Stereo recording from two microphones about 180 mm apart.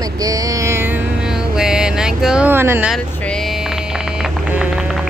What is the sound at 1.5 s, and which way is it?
Vehicle, 5° right (ahead or behind).